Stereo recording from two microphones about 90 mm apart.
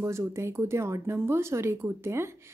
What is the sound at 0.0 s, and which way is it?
A woman's voice, 35° right (ahead or behind).